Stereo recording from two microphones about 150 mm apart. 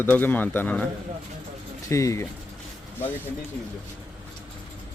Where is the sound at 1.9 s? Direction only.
20° left (ahead or behind).